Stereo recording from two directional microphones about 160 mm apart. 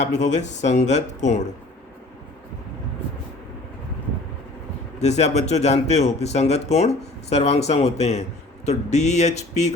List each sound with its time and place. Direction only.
0.0 s speech: 45° left (ahead or behind)
4.9 s speech: 45° left (ahead or behind)